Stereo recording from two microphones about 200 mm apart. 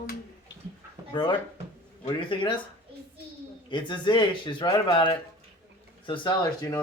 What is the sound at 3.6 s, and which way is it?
Speech, 25° left (ahead or behind).